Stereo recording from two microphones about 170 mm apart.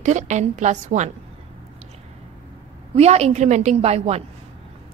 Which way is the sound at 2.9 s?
40° right (ahead or behind).